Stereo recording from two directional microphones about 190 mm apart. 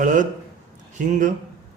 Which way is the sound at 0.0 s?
45° right (ahead or behind).